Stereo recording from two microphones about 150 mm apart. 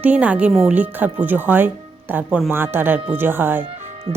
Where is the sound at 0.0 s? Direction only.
10° right (ahead or behind).